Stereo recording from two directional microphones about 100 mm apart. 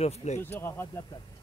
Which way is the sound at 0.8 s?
40° left (ahead or behind).